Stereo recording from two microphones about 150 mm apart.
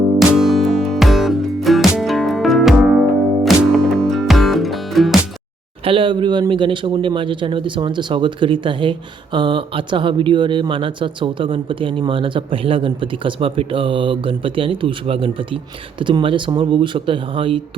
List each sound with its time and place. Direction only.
0.2 s music: centre (ahead or behind)
5.8 s speech: 35° right (ahead or behind)